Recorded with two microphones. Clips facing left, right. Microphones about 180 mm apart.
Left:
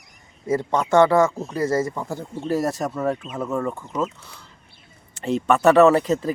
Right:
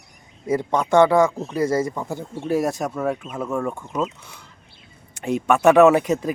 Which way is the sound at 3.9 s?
15° right (ahead or behind).